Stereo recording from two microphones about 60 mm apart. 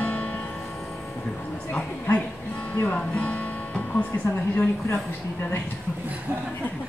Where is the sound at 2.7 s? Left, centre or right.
Left.